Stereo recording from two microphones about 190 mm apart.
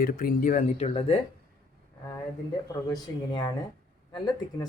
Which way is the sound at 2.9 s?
25° left (ahead or behind).